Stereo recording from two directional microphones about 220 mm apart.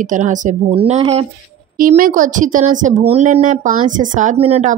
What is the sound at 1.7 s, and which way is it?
Speech, 40° right (ahead or behind).